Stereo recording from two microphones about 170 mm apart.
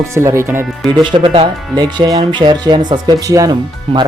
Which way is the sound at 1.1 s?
30° right (ahead or behind).